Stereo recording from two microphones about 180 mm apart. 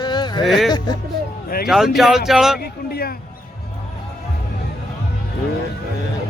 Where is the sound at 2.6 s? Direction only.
60° left (ahead or behind).